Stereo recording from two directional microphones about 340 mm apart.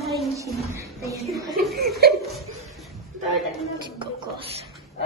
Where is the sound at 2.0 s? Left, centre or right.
Right.